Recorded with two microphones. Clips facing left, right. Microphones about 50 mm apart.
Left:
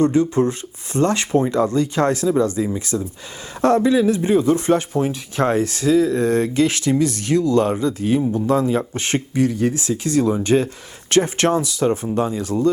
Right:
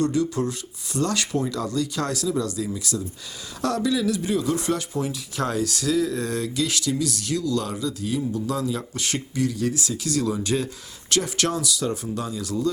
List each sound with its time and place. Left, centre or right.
0.0 s speech: left